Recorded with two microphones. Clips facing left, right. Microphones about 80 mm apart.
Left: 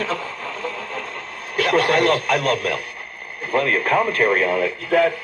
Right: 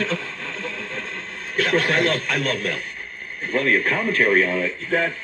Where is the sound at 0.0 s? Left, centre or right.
Left.